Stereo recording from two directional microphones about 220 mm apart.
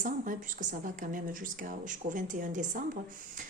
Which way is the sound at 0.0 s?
35° right (ahead or behind).